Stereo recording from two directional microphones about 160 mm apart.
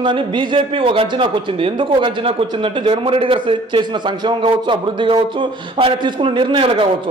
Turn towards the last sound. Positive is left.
turn(degrees=-35)  # may be behind; listen again after turning